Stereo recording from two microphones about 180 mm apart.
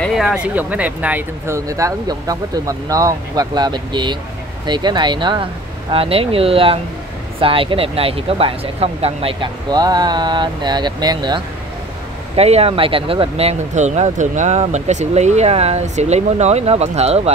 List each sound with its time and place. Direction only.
0.0 s speech: centre (ahead or behind); by 11.4 s 25° right (ahead or behind)
12.4 s speech: 35° right (ahead or behind)